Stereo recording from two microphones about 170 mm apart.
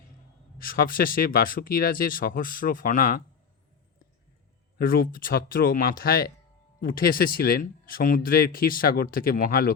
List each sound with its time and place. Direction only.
0.6 s speech: 60° left (ahead or behind)
4.8 s speech: 60° left (ahead or behind)